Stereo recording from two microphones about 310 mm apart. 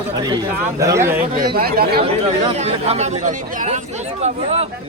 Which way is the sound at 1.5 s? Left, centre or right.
Right.